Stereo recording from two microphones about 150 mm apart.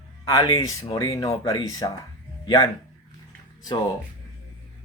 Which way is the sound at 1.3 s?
35° left (ahead or behind).